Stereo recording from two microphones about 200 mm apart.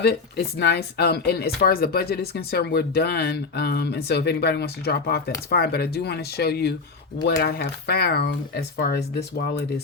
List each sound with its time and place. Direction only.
0.0 s speech: 55° left (ahead or behind)